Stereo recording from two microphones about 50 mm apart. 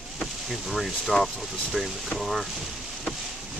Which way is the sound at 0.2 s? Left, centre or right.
Centre.